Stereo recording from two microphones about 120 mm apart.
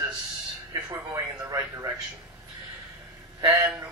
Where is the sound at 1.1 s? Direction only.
30° right (ahead or behind).